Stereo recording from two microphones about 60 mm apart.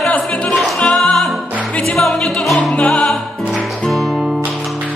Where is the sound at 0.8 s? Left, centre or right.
Centre.